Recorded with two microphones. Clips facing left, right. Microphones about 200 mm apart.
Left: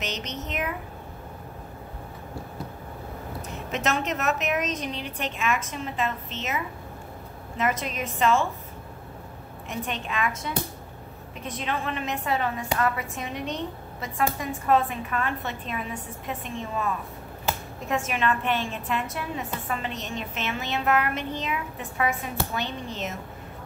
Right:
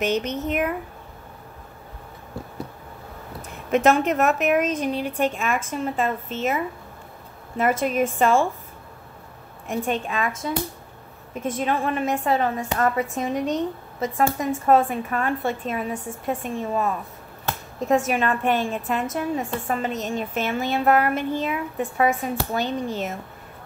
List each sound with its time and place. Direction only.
0.0 s a woman's voice: 55° right (ahead or behind)
3.4 s a woman's voice: 55° right (ahead or behind)
9.7 s a woman's voice: 45° right (ahead or behind)